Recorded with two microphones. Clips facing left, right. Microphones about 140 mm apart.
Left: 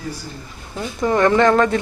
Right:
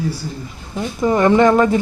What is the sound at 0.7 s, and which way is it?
A man's voice, 10° right (ahead or behind).